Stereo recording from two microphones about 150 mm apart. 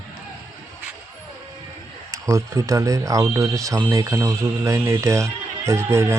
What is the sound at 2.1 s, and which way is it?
Speech, 20° right (ahead or behind).